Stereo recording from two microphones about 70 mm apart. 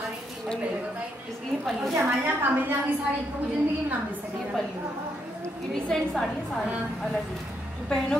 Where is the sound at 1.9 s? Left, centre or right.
Right.